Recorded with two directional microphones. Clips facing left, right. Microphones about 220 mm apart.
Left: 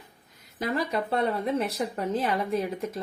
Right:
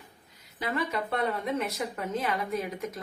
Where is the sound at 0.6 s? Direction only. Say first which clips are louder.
Left 3 dB; 35° left (ahead or behind).